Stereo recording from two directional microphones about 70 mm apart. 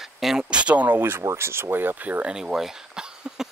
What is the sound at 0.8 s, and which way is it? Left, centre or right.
Speech, right.